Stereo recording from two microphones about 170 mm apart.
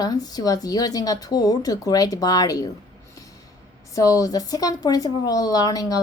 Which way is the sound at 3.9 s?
20° left (ahead or behind).